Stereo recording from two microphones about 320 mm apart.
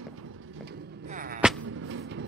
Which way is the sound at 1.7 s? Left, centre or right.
Right.